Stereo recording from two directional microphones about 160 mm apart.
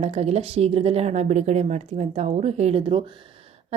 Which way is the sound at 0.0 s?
40° right (ahead or behind).